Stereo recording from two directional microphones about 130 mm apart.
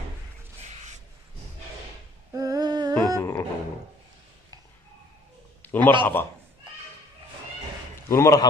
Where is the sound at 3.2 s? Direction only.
20° left (ahead or behind).